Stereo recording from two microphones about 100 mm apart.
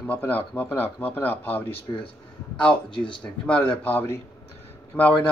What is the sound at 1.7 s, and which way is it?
Speech, 65° left (ahead or behind).